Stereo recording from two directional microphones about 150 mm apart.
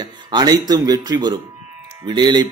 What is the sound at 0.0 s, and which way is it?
Speech, 30° right (ahead or behind).